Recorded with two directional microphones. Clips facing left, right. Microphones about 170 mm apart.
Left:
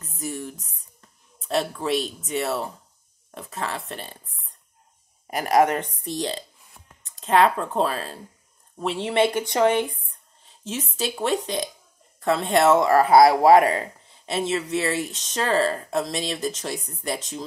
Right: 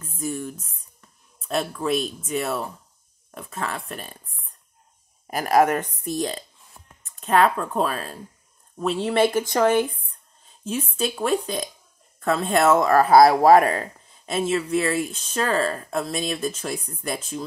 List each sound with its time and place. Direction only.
0.0 s a sound: 35° left (ahead or behind)
1.5 s speech: 35° left (ahead or behind)
5.3 s speech: 25° left (ahead or behind)
11.1 s speech: 30° left (ahead or behind)